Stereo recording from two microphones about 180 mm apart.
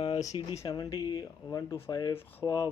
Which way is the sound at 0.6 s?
20° left (ahead or behind).